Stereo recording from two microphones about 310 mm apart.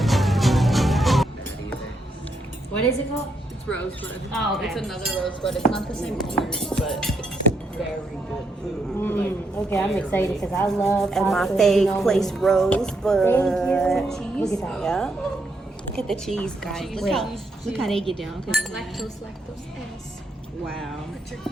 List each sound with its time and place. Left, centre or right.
0.0 s music: centre
3.7 s speech: centre
9.0 s a man's voice: centre
20.7 s speech: centre